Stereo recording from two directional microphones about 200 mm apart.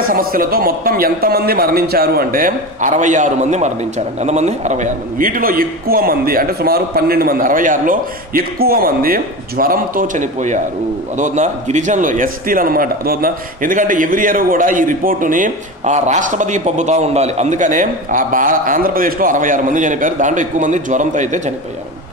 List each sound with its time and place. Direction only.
0.0 s a man's voice: 45° right (ahead or behind)